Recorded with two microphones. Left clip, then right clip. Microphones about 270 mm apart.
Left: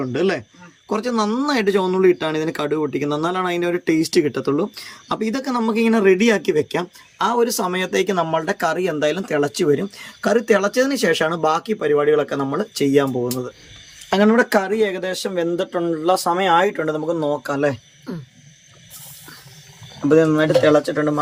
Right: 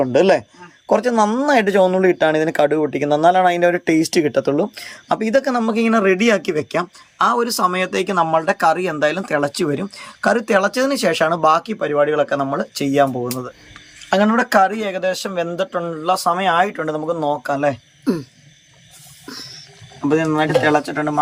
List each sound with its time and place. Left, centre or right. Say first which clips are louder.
0.0 s speech: right 7 dB; centre
20.1 s speech: left 2 dB; centre